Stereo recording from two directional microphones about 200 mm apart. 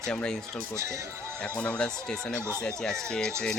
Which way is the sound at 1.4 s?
10° left (ahead or behind).